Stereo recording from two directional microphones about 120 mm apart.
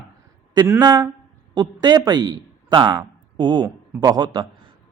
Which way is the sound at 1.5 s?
35° right (ahead or behind).